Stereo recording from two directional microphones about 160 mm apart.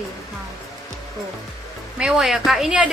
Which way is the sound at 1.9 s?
Centre (ahead or behind).